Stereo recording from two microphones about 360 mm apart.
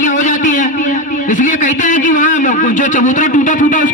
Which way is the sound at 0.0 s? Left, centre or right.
Left.